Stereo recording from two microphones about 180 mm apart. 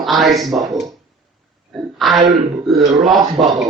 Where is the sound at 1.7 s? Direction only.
Centre (ahead or behind).